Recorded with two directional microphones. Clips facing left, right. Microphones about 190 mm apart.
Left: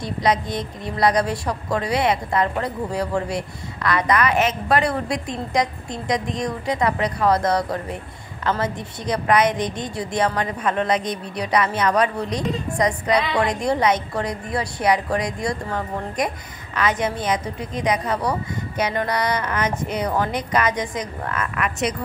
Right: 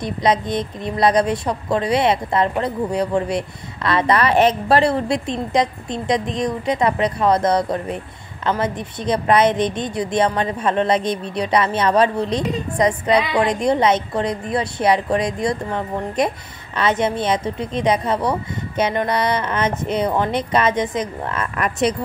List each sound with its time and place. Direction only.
0.0 s a woman's voice: 20° right (ahead or behind)
21.5 s a woman's voice: 35° right (ahead or behind)